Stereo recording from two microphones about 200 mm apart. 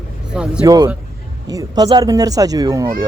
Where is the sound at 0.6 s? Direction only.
20° right (ahead or behind).